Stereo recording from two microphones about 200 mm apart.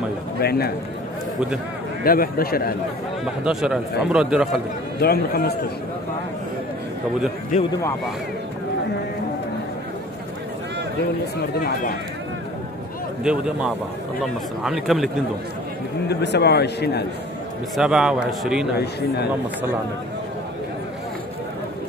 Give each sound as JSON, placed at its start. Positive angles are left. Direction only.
{"t": 0.4, "sound": "a man's voice", "side_deg": 50}
{"t": 2.0, "sound": "a man's voice", "side_deg": 50}
{"t": 3.4, "sound": "speech", "side_deg": -5}
{"t": 5.0, "sound": "a man's voice", "side_deg": 50}
{"t": 7.5, "sound": "speech", "side_deg": 40}
{"t": 11.5, "sound": "a man's voice", "side_deg": 50}
{"t": 13.2, "sound": "speech", "side_deg": -5}
{"t": 16.1, "sound": "speech", "side_deg": 55}
{"t": 17.7, "sound": "speech", "side_deg": -5}
{"t": 18.8, "sound": "speech", "side_deg": 55}